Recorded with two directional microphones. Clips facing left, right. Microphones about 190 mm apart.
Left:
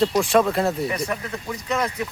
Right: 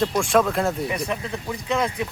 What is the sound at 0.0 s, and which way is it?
Speech, centre (ahead or behind).